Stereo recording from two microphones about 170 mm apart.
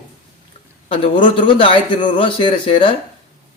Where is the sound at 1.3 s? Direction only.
30° left (ahead or behind).